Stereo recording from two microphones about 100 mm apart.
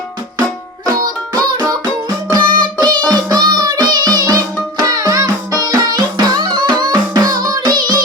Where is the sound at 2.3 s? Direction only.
50° right (ahead or behind).